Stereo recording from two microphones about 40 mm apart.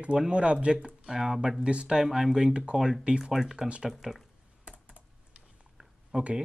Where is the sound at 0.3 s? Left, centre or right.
Right; by 2.5 s centre.